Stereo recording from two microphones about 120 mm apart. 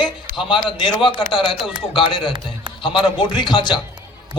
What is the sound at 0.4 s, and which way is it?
A man's voice, 45° left (ahead or behind).